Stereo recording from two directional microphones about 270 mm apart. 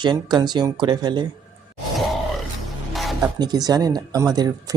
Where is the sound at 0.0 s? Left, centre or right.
Centre.